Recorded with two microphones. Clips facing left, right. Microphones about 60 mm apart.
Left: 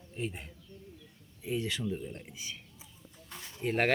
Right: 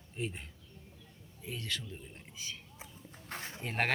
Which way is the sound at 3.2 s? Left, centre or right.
Right.